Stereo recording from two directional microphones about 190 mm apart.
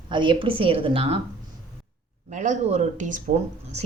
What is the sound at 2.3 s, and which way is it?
Speech, 40° right (ahead or behind).